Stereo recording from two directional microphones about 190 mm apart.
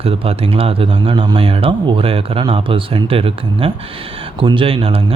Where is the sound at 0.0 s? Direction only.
30° right (ahead or behind).